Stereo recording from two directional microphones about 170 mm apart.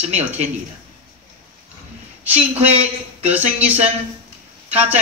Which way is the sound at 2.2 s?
10° right (ahead or behind).